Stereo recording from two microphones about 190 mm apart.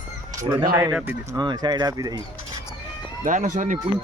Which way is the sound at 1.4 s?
20° right (ahead or behind).